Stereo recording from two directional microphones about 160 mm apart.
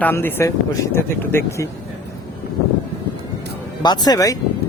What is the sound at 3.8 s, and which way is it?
Speech, 25° left (ahead or behind).